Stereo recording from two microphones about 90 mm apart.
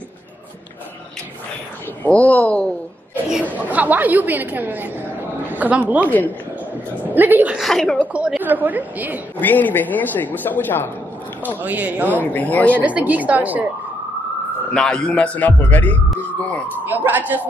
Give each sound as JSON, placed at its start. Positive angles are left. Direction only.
{"t": 2.0, "sound": "a man's voice", "side_deg": 15}
{"t": 3.5, "sound": "speech", "side_deg": -15}
{"t": 6.0, "sound": "speech", "side_deg": 20}
{"t": 7.2, "sound": "a woman's voice", "side_deg": -20}
{"t": 7.5, "sound": "a woman's voice", "side_deg": 0}
{"t": 8.1, "sound": "a woman's voice", "side_deg": -15}
{"t": 9.4, "sound": "speech", "side_deg": 20}
{"t": 11.6, "sound": "a woman's voice", "side_deg": -20}
{"t": 12.2, "sound": "speech", "side_deg": 20}
{"t": 12.8, "sound": "a woman's voice", "side_deg": -15}
{"t": 14.7, "sound": "a man's voice", "side_deg": 10}
{"t": 16.9, "sound": "a woman's voice", "side_deg": -20}